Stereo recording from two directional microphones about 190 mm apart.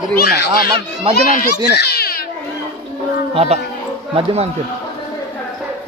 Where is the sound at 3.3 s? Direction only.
30° right (ahead or behind).